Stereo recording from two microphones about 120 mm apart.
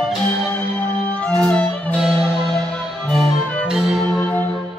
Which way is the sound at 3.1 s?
5° left (ahead or behind).